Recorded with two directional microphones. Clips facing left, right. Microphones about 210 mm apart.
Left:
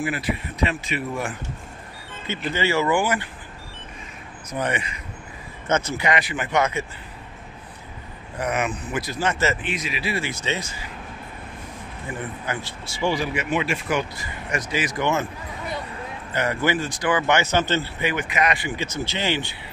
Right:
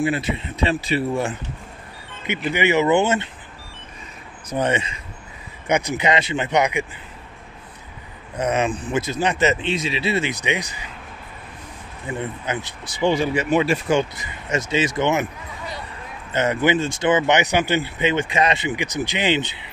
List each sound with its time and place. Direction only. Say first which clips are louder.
0.0 s speech: right 4 dB; 25° right (ahead or behind)
2.5 s speech: right 4 dB; 20° right (ahead or behind)
4.5 s speech: right 5 dB; 25° right (ahead or behind)
8.4 s speech: right 4 dB; 25° right (ahead or behind)
12.1 s speech: right 4 dB; 20° right (ahead or behind)
16.3 s speech: right 4 dB; 20° right (ahead or behind)